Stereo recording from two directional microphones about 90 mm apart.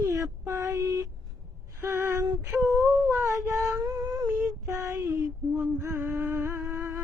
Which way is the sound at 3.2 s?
35° right (ahead or behind).